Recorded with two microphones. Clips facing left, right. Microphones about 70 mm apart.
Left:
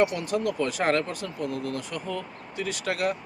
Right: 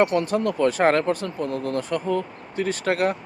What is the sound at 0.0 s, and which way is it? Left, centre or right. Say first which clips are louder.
Speech: right 4 dB; right.